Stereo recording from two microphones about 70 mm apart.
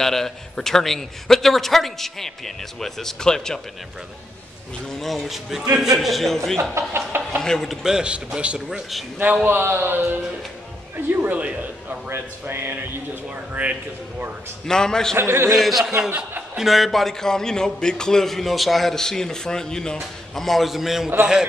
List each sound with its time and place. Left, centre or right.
0.0 s a man's voice: centre
5.0 s a man's voice: centre
6.6 s speech: right
7.4 s a man's voice: centre
7.8 s speech: centre
9.2 s speech: right
11.3 s a man's voice: centre
12.1 s speech: right
14.7 s a man's voice: centre
15.1 s speech: right
16.1 s speech: right
16.5 s a man's voice: centre